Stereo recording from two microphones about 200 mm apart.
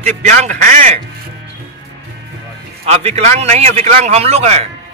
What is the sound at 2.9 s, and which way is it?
A man's voice, 30° right (ahead or behind).